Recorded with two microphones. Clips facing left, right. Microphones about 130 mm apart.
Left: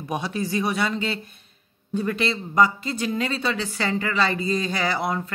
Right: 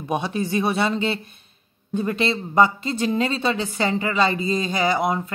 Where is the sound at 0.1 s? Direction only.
20° right (ahead or behind).